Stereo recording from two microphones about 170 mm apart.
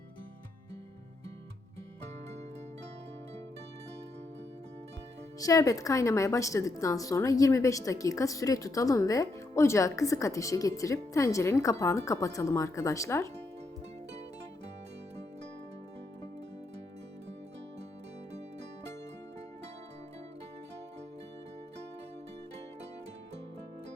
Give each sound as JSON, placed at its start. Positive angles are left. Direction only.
{"t": 5.4, "sound": "a woman's voice", "side_deg": 20}